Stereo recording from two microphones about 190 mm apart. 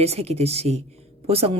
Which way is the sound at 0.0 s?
35° right (ahead or behind).